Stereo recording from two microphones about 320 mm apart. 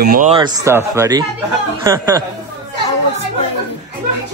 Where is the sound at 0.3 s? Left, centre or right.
Centre.